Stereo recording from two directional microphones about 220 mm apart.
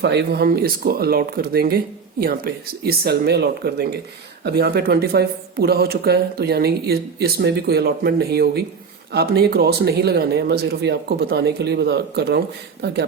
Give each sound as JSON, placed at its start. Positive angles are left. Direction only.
{"t": 0.0, "sound": "speech", "side_deg": -50}